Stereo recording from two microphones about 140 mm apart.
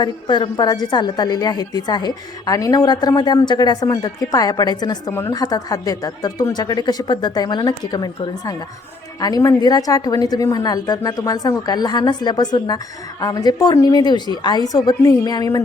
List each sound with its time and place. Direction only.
0.0 s a woman's voice: 35° left (ahead or behind)